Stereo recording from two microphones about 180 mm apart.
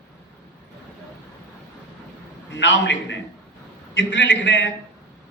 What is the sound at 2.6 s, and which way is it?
A man's voice, 85° left.